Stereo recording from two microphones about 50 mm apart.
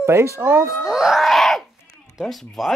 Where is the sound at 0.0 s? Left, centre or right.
Right.